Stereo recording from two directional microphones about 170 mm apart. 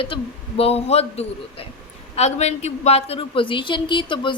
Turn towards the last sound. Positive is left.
turn(degrees=30)  # may be behind; listen again after turning